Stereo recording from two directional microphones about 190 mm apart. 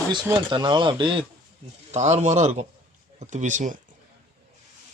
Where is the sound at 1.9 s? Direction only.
35° right (ahead or behind).